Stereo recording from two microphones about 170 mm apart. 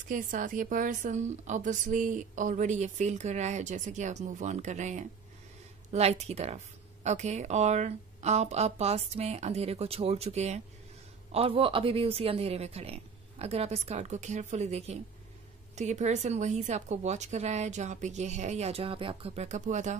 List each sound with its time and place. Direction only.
0.1 s a woman's voice: 50° right (ahead or behind)